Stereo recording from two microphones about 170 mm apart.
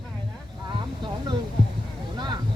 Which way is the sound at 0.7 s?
25° right (ahead or behind).